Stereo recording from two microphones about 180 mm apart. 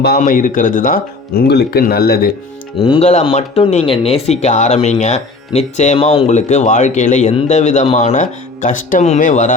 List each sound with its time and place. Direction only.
0.2 s speech: 50° left (ahead or behind)
1.4 s speech: 60° left (ahead or behind)
2.8 s speech: 30° left (ahead or behind)
3.1 s speech: 40° left (ahead or behind)